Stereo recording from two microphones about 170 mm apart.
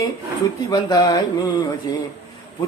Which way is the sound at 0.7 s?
20° left (ahead or behind).